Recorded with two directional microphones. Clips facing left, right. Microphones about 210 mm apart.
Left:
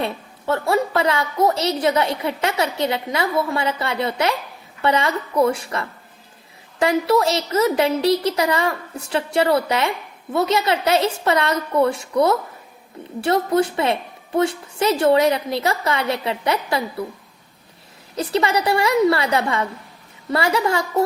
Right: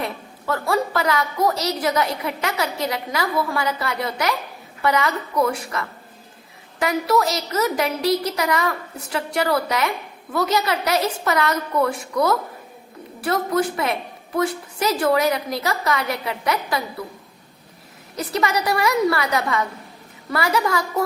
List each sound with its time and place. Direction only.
0.0 s a woman's voice: 25° left (ahead or behind)
18.2 s a woman's voice: 30° left (ahead or behind)